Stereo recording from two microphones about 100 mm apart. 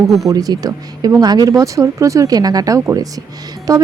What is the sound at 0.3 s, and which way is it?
Speech, 40° right (ahead or behind).